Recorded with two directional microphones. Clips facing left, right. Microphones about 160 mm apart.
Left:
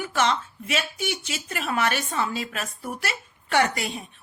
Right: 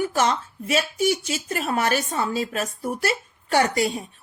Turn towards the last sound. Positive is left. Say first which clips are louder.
# right 3 dB
turn(degrees=-35)  # may be behind; listen again after turning